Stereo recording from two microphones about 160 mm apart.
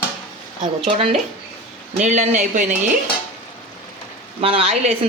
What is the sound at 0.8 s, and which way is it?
Speech, 35° right (ahead or behind).